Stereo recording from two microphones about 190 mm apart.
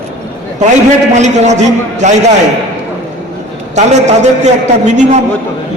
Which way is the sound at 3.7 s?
35° right (ahead or behind).